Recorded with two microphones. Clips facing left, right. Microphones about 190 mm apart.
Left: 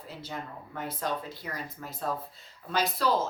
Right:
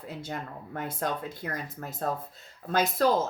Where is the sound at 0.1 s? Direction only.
50° right (ahead or behind).